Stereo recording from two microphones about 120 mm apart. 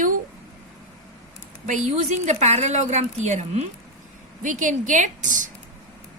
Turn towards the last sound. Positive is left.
turn(degrees=-90)